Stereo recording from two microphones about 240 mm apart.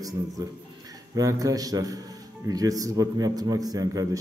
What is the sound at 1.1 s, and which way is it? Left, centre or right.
A man's voice, centre.